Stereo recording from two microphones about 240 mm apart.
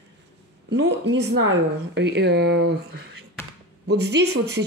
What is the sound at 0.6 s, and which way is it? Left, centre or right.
Speech, right.